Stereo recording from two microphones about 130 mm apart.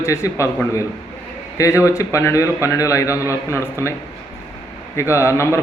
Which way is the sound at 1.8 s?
25° left (ahead or behind).